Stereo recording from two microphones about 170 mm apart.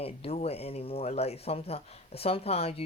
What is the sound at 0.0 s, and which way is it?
A woman's voice, 35° left (ahead or behind).